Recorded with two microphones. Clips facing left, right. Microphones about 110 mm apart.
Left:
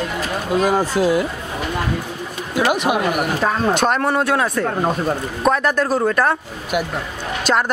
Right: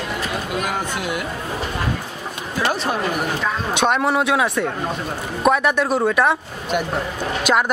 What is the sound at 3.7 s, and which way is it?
A man's voice, centre (ahead or behind).